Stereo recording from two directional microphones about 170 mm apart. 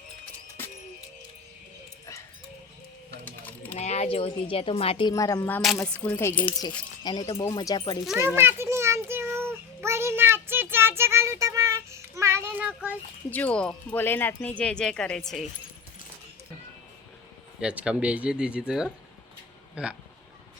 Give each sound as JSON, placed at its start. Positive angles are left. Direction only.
{"t": 3.1, "sound": "music", "side_deg": 10}
{"t": 3.8, "sound": "speech", "side_deg": 40}
{"t": 5.1, "sound": "speech", "side_deg": 20}
{"t": 6.4, "sound": "speech", "side_deg": 25}
{"t": 8.4, "sound": "child singing", "side_deg": -15}
{"t": 13.3, "sound": "speech", "side_deg": 5}
{"t": 17.6, "sound": "speech", "side_deg": -5}